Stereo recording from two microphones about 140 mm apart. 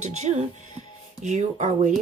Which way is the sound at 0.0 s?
50° right (ahead or behind).